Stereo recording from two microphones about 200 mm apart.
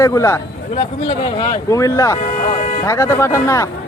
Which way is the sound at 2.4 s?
40° left (ahead or behind).